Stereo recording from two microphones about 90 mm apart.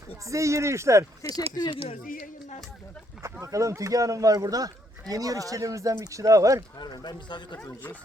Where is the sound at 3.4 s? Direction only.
35° right (ahead or behind).